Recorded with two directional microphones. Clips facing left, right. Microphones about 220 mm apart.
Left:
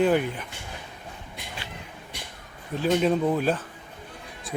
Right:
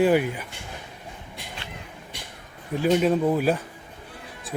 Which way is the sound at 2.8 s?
5° right (ahead or behind).